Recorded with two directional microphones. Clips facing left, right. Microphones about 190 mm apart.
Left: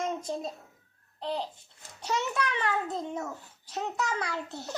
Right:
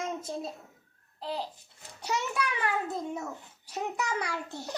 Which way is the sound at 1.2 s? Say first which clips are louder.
Left 2 dB; 5° right (ahead or behind).